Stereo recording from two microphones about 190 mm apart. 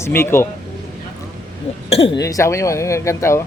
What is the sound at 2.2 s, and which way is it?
Speech, 15° left (ahead or behind).